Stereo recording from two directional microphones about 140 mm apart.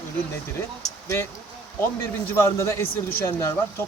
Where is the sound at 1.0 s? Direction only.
20° left (ahead or behind).